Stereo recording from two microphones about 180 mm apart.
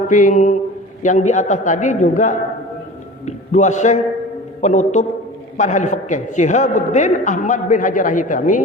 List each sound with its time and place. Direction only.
0.1 s a man's voice: 45° left (ahead or behind)